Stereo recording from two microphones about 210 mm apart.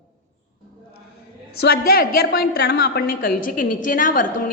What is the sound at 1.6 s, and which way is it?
A woman's voice, 45° left (ahead or behind).